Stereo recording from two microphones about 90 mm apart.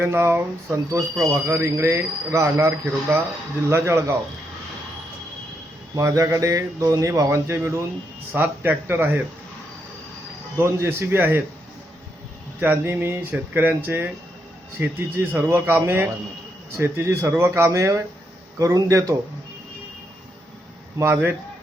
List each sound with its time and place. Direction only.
0.0 s a man's voice: 25° right (ahead or behind)
6.0 s a man's voice: 35° right (ahead or behind)
10.6 s a man's voice: 25° right (ahead or behind)
12.5 s a man's voice: 20° right (ahead or behind); by 19.1 s 40° right (ahead or behind)
21.0 s a man's voice: 25° right (ahead or behind)